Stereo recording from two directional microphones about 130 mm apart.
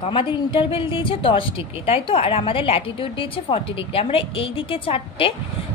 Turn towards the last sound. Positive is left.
turn(degrees=45)  # may be behind; listen again after turning